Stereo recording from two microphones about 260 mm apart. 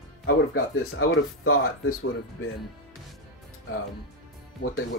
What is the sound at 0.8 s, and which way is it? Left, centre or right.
Speech, left.